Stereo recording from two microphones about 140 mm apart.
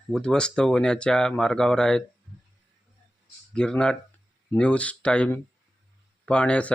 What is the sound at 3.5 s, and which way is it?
Speech, 5° left (ahead or behind).